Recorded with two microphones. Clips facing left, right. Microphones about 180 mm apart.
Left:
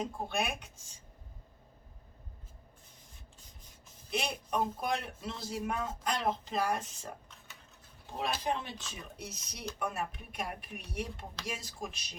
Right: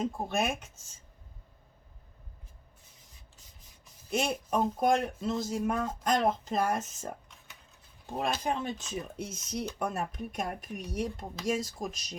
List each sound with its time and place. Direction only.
0.0 s speech: 45° right (ahead or behind)
4.1 s speech: 45° right (ahead or behind)
8.2 s speech: 45° right (ahead or behind)